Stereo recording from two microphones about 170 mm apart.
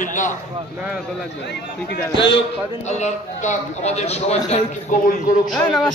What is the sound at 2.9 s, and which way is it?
A man's voice, 40° left (ahead or behind).